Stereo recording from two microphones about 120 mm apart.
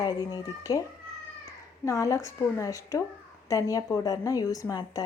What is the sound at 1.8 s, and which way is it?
A woman's voice, 25° left (ahead or behind).